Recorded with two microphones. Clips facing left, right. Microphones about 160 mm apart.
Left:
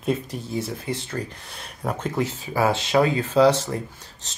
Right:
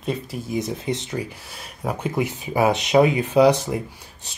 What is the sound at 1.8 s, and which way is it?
Speech, 10° right (ahead or behind).